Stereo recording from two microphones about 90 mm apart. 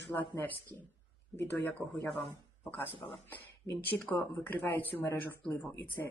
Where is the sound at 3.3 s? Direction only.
20° left (ahead or behind).